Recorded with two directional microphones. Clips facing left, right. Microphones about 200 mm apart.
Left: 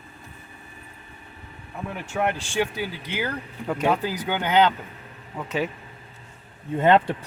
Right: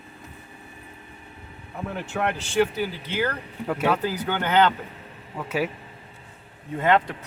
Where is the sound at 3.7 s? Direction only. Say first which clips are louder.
Even; 5° right (ahead or behind).